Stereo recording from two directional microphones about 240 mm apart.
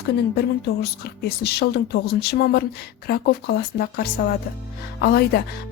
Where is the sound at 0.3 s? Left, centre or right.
Left.